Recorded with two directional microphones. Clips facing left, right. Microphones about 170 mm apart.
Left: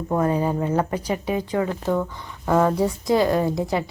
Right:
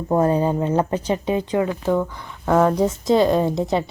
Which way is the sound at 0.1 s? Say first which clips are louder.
Right 3 dB; 30° right (ahead or behind).